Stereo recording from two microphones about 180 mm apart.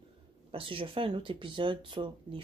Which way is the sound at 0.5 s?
30° right (ahead or behind).